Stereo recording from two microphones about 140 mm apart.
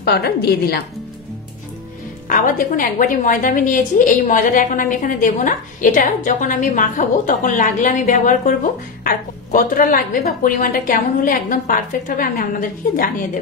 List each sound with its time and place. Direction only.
2.2 s a woman's voice: 75° left (ahead or behind)
9.0 s a woman's voice: 80° left